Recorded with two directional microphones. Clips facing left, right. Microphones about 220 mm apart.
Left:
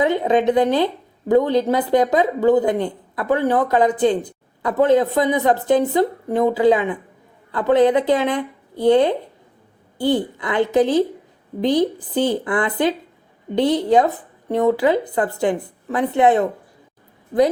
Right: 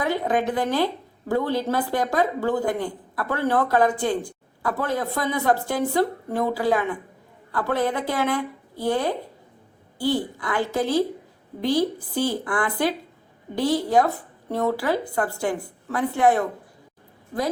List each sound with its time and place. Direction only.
0.0 s speech: 20° left (ahead or behind)